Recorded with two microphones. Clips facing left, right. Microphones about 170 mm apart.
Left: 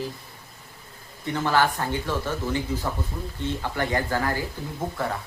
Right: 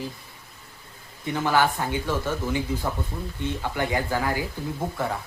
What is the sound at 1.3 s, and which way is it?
Speech, 10° right (ahead or behind).